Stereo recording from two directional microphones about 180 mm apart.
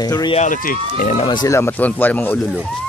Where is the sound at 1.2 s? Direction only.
25° left (ahead or behind); by 2.7 s centre (ahead or behind).